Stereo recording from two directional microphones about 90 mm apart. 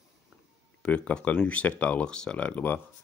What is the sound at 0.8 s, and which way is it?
Speech, 15° left (ahead or behind).